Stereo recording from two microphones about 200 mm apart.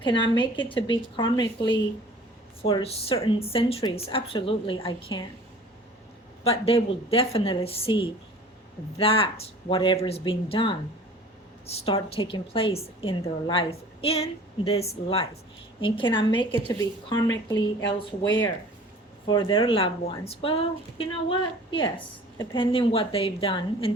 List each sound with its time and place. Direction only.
0.0 s a woman's voice: 25° left (ahead or behind)
6.4 s a woman's voice: 30° left (ahead or behind)
19.3 s a woman's voice: 20° left (ahead or behind)
22.5 s a woman's voice: 25° left (ahead or behind)